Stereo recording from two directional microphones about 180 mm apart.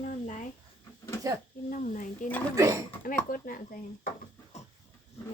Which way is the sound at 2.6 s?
15° right (ahead or behind).